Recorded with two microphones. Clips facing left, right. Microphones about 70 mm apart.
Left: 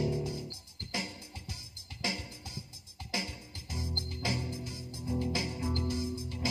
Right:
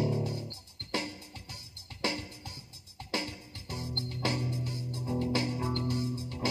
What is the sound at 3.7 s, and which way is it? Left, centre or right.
Music, right.